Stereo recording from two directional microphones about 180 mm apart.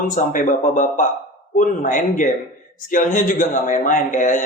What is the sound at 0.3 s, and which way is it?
A man's voice, 45° left (ahead or behind).